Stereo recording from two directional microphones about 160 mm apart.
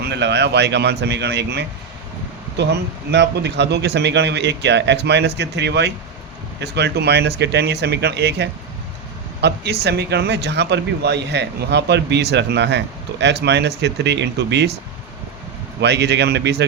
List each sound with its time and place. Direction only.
0.0 s speech: 90° right
3.1 s speech: 90° right
15.8 s speech: 90° right